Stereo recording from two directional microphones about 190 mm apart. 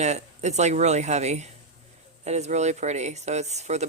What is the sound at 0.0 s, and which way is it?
Speech, 35° right (ahead or behind).